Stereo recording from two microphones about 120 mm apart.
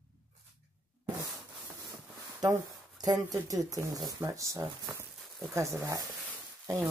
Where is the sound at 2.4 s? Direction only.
35° right (ahead or behind).